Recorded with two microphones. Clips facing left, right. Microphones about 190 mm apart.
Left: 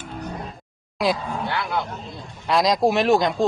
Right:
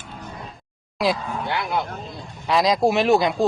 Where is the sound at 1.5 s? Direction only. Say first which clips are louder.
Right 2 dB; 15° right (ahead or behind).